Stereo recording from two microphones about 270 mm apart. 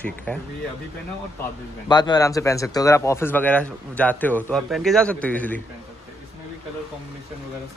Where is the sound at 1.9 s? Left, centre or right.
Centre.